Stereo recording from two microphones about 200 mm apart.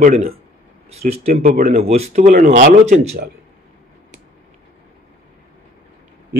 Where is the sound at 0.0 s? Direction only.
35° right (ahead or behind).